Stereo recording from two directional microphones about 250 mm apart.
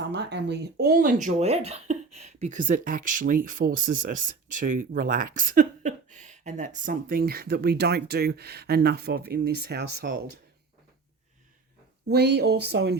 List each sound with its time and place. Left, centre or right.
0.1 s speech: right
2.0 s a sound: right
2.4 s speech: right
12.0 s speech: right